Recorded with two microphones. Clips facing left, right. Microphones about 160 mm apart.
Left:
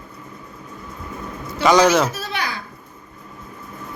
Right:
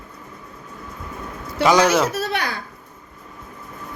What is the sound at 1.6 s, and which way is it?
Speech, 5° right (ahead or behind).